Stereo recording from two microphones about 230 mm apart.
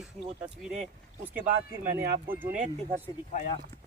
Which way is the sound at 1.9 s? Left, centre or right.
Centre.